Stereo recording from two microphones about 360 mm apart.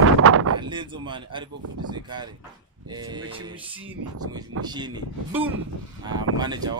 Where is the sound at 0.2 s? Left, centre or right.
Right.